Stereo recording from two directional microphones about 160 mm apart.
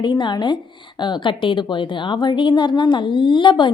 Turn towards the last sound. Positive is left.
turn(degrees=30)  # may be behind; listen again after turning